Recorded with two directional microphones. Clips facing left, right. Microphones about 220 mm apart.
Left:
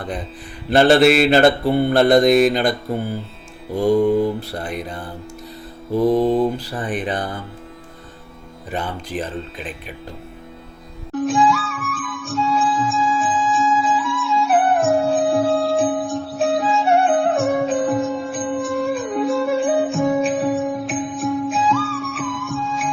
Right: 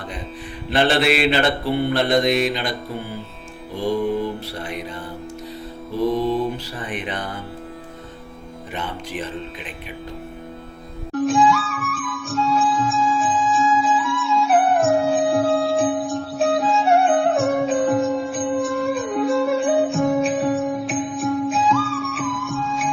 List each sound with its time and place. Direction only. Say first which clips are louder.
0.7 s mantra: left 6 dB; 45° left (ahead or behind)
6.1 s mantra: left 5 dB; 50° left (ahead or behind)
6.8 s speech: left 5 dB; 35° left (ahead or behind)
11.1 s music: even; centre (ahead or behind)